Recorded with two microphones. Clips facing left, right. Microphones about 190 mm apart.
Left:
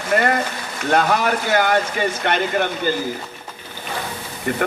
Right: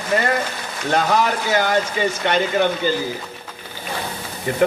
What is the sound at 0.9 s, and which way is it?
A man's voice, 55° left (ahead or behind).